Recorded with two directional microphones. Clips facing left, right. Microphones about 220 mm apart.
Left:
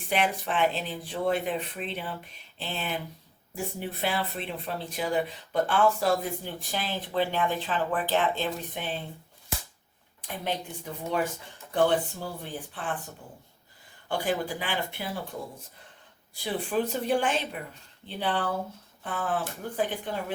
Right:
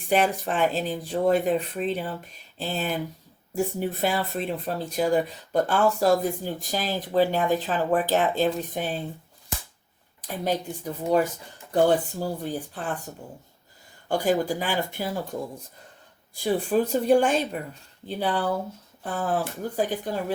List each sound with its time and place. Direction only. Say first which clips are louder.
0.1 s speech: right 5 dB; 40° right (ahead or behind)
10.2 s a woman's voice: right 6 dB; 40° right (ahead or behind)
11.7 s speech: right 4 dB; 40° right (ahead or behind)
14.1 s speech: right 6 dB; 45° right (ahead or behind)
16.3 s speech: right 6 dB; 45° right (ahead or behind)